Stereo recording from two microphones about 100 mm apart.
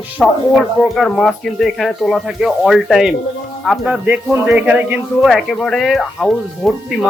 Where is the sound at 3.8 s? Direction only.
10° right (ahead or behind).